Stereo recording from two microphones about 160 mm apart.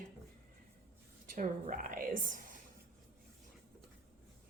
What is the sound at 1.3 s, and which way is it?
A woman's voice, 55° right (ahead or behind).